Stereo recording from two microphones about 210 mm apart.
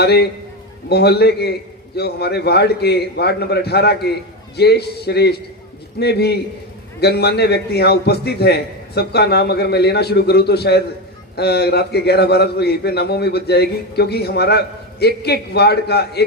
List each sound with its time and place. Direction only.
0.0 s a man's voice: 50° left (ahead or behind)